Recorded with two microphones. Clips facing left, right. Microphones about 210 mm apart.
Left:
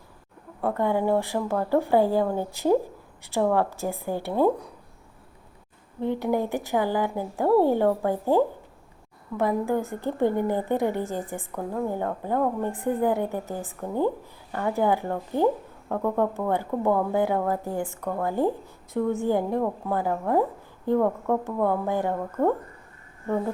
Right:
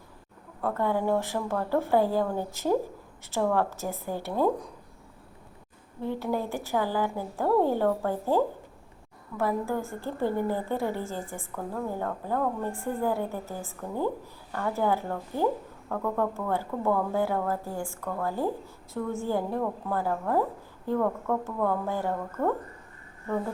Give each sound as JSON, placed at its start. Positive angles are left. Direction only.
{"t": 0.6, "sound": "a woman's voice", "side_deg": 15}
{"t": 6.0, "sound": "a woman's voice", "side_deg": 20}